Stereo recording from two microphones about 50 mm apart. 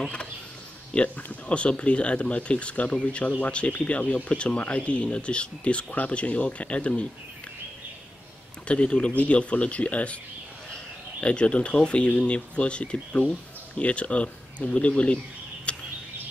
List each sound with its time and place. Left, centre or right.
0.9 s speech: left
8.6 s speech: left
11.1 s speech: left
15.7 s a sound: left